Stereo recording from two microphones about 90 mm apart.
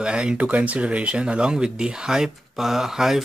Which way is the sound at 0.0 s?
10° right (ahead or behind).